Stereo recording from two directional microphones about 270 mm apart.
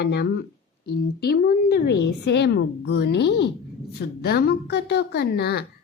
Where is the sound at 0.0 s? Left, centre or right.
Left.